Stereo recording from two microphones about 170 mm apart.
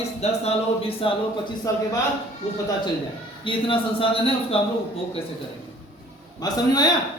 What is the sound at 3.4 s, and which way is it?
Speech, 30° left (ahead or behind).